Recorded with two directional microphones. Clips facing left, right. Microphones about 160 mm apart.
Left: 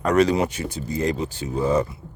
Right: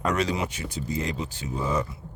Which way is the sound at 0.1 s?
40° left (ahead or behind).